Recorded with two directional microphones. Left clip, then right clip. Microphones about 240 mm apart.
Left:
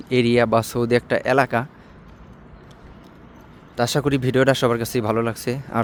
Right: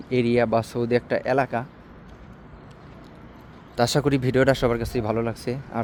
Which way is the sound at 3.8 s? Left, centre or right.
Centre.